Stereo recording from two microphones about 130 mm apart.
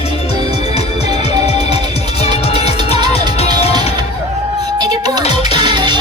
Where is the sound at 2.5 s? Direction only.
50° left (ahead or behind).